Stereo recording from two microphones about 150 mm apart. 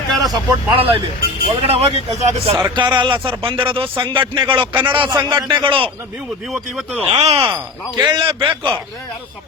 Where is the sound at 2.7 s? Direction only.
30° right (ahead or behind).